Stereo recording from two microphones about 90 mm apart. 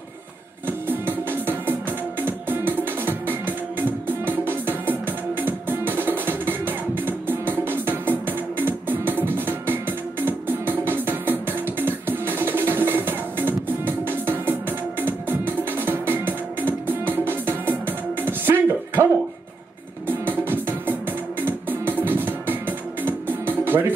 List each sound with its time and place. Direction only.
0.7 s music: 20° right (ahead or behind)